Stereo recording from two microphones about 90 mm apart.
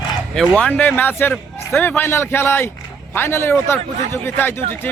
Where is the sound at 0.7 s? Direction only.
20° left (ahead or behind).